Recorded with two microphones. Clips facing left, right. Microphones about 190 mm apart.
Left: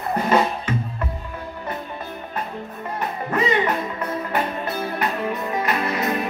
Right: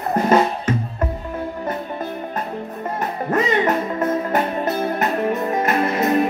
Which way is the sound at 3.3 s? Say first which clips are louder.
Right 3 dB; 45° right (ahead or behind).